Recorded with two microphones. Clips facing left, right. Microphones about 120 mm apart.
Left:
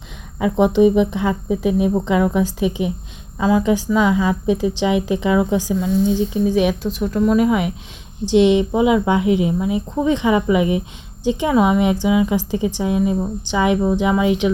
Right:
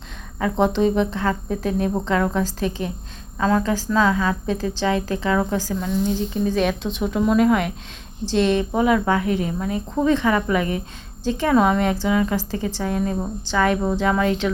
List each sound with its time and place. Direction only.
0.6 s speech: 15° left (ahead or behind)
7.0 s speech: 5° right (ahead or behind); by 14.5 s 15° left (ahead or behind)